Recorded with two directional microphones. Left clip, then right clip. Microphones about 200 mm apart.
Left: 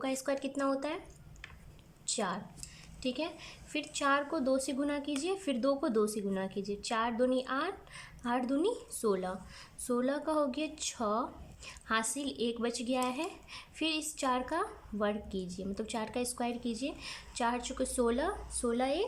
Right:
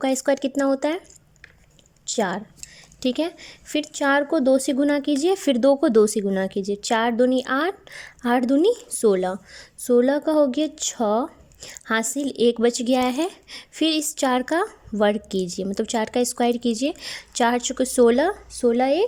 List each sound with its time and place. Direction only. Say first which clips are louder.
0.0 s speech: right 13 dB; 40° right (ahead or behind)
2.0 s speech: right 11 dB; 35° right (ahead or behind)